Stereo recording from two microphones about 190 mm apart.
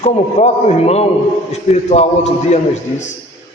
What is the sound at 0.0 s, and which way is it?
A man's voice, 35° left (ahead or behind).